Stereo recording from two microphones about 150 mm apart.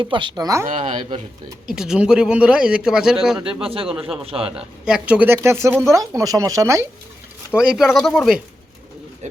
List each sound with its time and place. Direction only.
0.0 s speech: 35° right (ahead or behind)
0.8 s a man's voice: 40° right (ahead or behind)
1.7 s speech: 5° right (ahead or behind)
3.6 s a man's voice: 40° right (ahead or behind)
4.5 s speech: 5° right (ahead or behind)
7.5 s speech: 5° right (ahead or behind)